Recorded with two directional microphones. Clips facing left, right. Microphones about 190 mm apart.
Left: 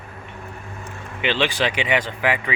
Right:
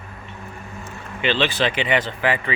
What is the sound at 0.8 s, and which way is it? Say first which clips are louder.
Speech: right 1 dB; 15° left (ahead or behind).